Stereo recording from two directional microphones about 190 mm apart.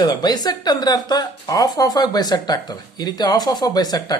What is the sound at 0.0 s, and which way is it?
Speech, 20° left (ahead or behind).